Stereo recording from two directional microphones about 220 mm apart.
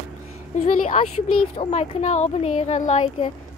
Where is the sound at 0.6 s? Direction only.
35° left (ahead or behind).